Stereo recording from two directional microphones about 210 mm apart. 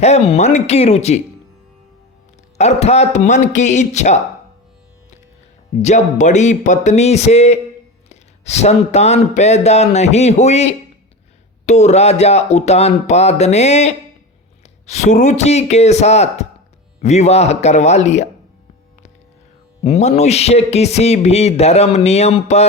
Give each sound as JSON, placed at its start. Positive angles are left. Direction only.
{"t": 0.0, "sound": "speech", "side_deg": 30}
{"t": 2.6, "sound": "speech", "side_deg": 30}
{"t": 5.8, "sound": "speech", "side_deg": 35}
{"t": 19.8, "sound": "speech", "side_deg": 30}